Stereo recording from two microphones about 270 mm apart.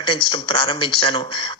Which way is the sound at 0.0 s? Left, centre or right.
Centre.